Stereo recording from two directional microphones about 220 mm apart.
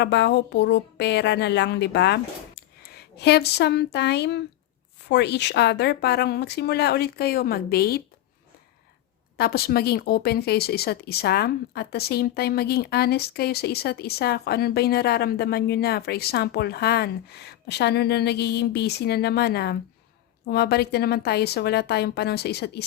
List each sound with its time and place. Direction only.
0.0 s a woman's voice: 50° left (ahead or behind)
9.4 s speech: 45° left (ahead or behind)